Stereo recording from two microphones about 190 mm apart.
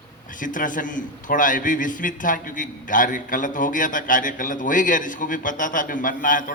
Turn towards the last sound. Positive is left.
turn(degrees=45)  # may be behind; listen again after turning